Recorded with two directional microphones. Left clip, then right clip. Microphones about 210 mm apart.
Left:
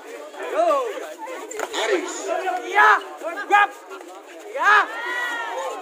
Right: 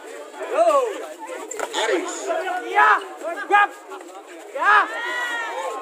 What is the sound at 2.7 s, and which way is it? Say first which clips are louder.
Crowd: left 1 dB; 45° left (ahead or behind).